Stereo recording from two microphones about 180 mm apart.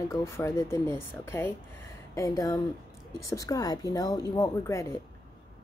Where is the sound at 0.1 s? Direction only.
15° left (ahead or behind).